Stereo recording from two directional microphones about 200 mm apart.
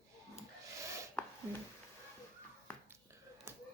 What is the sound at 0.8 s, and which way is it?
Chopping, 15° right (ahead or behind).